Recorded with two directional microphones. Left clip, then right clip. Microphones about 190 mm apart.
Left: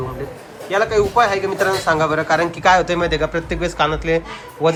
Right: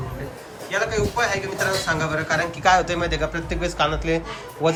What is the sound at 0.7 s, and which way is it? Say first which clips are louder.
Speech: left 7 dB; 10° left (ahead or behind).